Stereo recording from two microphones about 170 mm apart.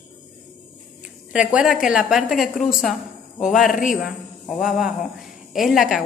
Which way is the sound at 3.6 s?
50° left (ahead or behind).